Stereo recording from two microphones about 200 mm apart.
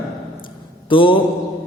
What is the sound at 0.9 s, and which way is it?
Speech, 25° left (ahead or behind).